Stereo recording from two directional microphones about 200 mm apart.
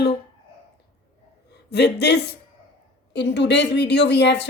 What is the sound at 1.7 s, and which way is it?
Speech, 55° left (ahead or behind).